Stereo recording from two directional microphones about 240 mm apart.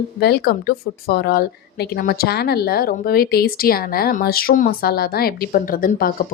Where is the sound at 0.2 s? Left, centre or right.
Left.